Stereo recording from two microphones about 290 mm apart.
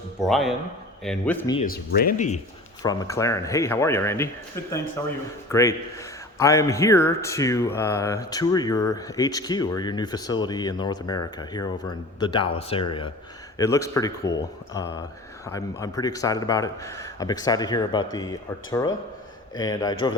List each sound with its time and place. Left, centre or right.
0.2 s speech: centre
1.5 s speech: left
2.8 s a man's voice: centre